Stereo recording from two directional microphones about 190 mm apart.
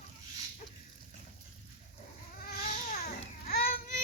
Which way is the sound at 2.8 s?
40° left (ahead or behind).